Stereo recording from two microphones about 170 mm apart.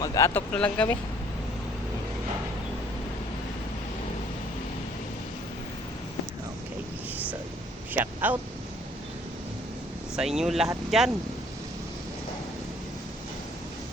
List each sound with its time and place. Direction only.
0.0 s speech: 20° left (ahead or behind)
0.3 s speech: 5° left (ahead or behind)
7.9 s speech: 10° right (ahead or behind)
10.2 s speech: 5° right (ahead or behind)